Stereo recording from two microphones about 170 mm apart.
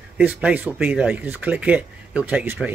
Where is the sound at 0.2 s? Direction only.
10° right (ahead or behind).